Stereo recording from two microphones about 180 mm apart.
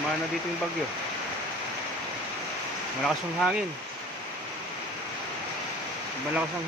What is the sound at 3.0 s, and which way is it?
Speech, centre (ahead or behind).